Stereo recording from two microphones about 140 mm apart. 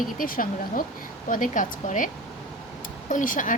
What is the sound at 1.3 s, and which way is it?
Speech, 65° left (ahead or behind).